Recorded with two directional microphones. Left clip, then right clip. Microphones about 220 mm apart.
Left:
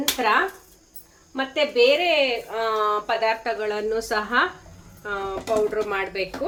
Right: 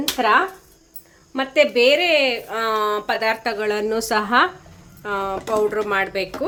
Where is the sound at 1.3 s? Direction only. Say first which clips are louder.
Right 5 dB; 50° right (ahead or behind).